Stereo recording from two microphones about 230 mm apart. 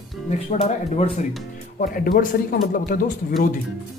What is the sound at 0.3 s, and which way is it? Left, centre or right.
Speech, left.